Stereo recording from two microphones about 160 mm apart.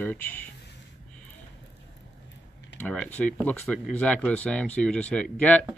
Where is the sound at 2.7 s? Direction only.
10° left (ahead or behind).